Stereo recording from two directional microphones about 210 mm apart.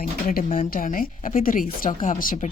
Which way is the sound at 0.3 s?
40° left (ahead or behind).